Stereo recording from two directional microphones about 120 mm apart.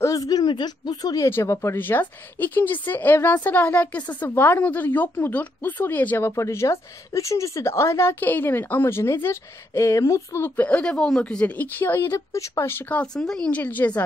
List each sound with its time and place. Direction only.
0.0 s speech: 30° left (ahead or behind)
13.0 s speech: 5° left (ahead or behind)